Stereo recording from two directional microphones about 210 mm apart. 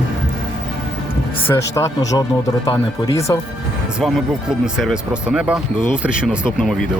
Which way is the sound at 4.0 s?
Centre (ahead or behind).